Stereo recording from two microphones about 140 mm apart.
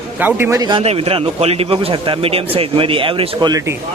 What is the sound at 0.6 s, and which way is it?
A man's voice, 45° right (ahead or behind).